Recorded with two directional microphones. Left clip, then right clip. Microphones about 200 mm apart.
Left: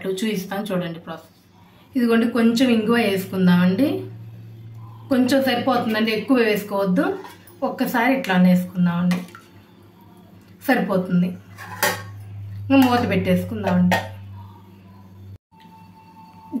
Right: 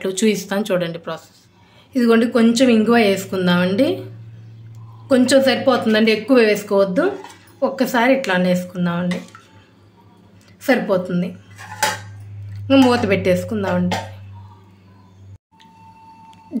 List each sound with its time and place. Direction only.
0.0 s a woman's voice: 55° right (ahead or behind)
5.0 s a woman's voice: 45° right (ahead or behind)
10.6 s a woman's voice: 40° right (ahead or behind)
12.6 s a woman's voice: 45° right (ahead or behind)